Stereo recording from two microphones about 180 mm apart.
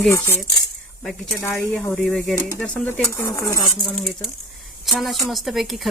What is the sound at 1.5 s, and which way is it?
Speech, 5° left (ahead or behind).